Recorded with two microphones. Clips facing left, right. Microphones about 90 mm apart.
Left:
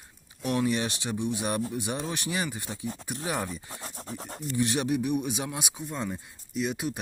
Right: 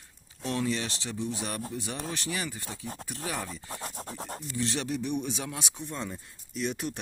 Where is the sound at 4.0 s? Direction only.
40° right (ahead or behind).